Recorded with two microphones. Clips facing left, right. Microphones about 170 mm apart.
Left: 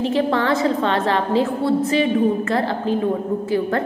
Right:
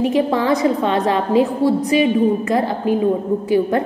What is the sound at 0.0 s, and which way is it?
A woman's voice, 15° right (ahead or behind).